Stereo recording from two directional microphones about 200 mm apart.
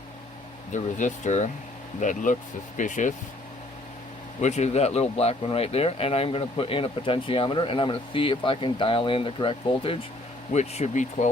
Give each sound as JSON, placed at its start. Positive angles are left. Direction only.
{"t": 0.7, "sound": "speech", "side_deg": 40}
{"t": 4.4, "sound": "speech", "side_deg": 35}